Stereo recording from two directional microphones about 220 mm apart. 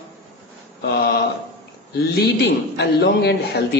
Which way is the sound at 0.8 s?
45° left (ahead or behind).